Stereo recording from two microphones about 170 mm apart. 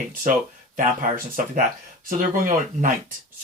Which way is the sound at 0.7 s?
55° right (ahead or behind).